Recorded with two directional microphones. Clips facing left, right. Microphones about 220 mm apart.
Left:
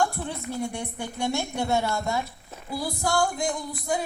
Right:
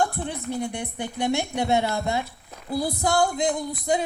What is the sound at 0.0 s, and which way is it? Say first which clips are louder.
Music: right 1 dB; 15° right (ahead or behind).